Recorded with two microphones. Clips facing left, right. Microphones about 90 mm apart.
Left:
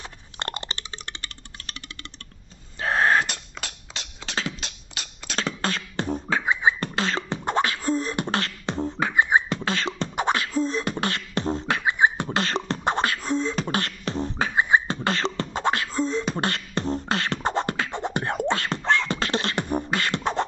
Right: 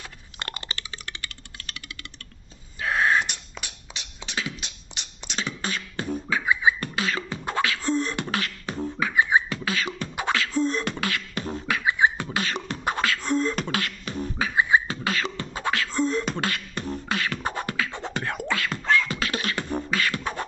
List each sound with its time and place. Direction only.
0.4 s a sound: 30° left (ahead or behind)
2.8 s wheeze: 40° left (ahead or behind)
4.3 s beatboxing: 35° left (ahead or behind)
7.8 s beatboxing: 5° left (ahead or behind)
8.2 s beatboxing: 35° left (ahead or behind)
10.5 s beatboxing: centre (ahead or behind)
11.0 s beatboxing: 30° left (ahead or behind)
12.4 s beatboxing: 35° left (ahead or behind)
13.2 s beatboxing: centre (ahead or behind)
13.7 s beatboxing: 35° left (ahead or behind)
15.9 s beatboxing: centre (ahead or behind)
16.4 s beatboxing: 30° left (ahead or behind)
17.9 s beatboxing: 20° left (ahead or behind)
18.3 s beatboxing: 35° left (ahead or behind)